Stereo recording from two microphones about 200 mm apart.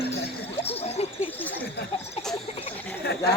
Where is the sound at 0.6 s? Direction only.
30° left (ahead or behind).